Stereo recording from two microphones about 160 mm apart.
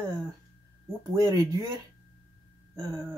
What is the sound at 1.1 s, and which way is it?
Speech, 20° right (ahead or behind).